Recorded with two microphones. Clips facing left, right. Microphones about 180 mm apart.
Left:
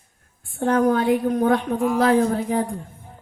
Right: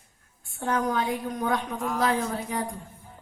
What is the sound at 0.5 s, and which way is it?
Speech, 50° left (ahead or behind).